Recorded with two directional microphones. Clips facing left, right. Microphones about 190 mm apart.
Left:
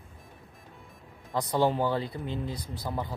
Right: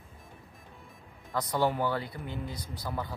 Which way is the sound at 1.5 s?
25° left (ahead or behind).